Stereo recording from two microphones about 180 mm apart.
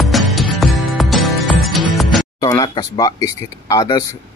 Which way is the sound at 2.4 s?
20° left (ahead or behind).